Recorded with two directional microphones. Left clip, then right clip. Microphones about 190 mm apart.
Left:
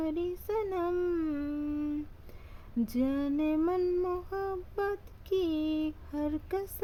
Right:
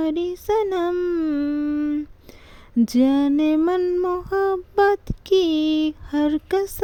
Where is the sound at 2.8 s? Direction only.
45° right (ahead or behind).